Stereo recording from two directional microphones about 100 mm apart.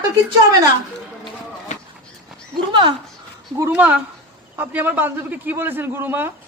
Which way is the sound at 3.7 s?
15° right (ahead or behind).